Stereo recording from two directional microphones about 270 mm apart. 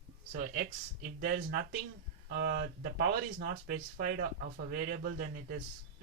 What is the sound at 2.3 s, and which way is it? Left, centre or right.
Speech, right.